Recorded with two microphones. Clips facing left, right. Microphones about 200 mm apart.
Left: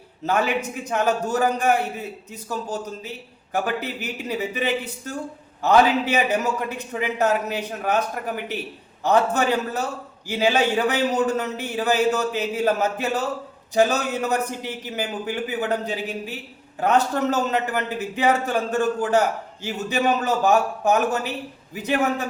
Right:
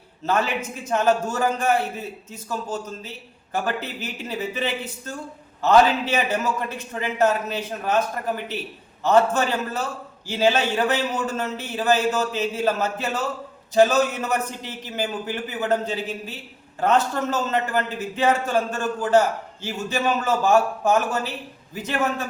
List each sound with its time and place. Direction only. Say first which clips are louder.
0.3 s a man's voice: left 1 dB; 15° left (ahead or behind)